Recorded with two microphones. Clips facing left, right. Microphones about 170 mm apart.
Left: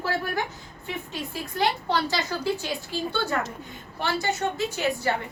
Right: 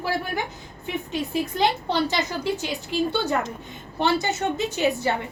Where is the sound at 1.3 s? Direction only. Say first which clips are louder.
Right 3 dB; 20° right (ahead or behind).